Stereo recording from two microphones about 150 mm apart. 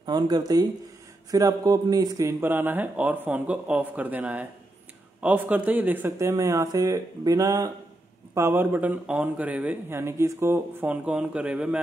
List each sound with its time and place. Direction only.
0.0 s a man's voice: 30° right (ahead or behind); by 11.8 s 5° right (ahead or behind)